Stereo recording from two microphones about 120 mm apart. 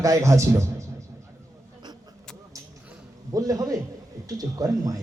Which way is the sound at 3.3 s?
30° right (ahead or behind).